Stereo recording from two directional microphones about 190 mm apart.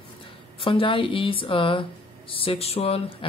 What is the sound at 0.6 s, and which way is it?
Speech, 30° left (ahead or behind).